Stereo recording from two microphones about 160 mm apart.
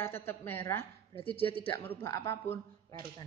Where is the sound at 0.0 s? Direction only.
15° left (ahead or behind).